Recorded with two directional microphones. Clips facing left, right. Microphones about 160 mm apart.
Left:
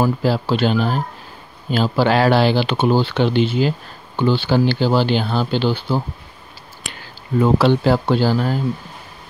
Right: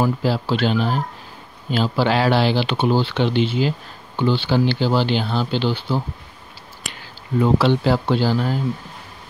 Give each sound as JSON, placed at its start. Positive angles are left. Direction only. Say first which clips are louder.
{"t": 0.0, "sound": "speech", "louder": "left 2 dB", "side_deg": 45}
{"t": 7.4, "sound": "speech", "louder": "left 2 dB", "side_deg": 45}